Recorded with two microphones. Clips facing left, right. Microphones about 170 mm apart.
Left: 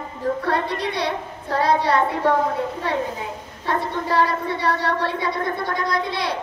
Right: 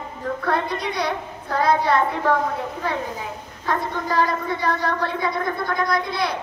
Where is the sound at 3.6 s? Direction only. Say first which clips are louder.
Left 1 dB; 30° left (ahead or behind).